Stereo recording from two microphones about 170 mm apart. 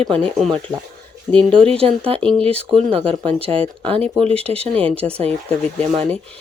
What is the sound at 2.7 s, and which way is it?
Speech, 15° right (ahead or behind).